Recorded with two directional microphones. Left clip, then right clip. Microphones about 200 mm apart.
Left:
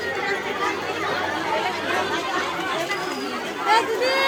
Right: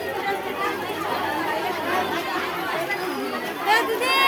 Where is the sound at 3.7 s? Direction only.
60° right (ahead or behind).